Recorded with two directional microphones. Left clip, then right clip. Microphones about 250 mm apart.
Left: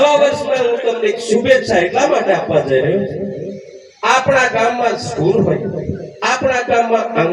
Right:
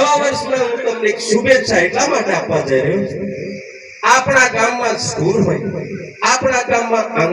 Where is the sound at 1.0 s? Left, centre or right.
Left.